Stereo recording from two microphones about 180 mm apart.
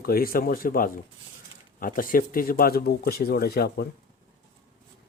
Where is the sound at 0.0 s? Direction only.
55° left (ahead or behind).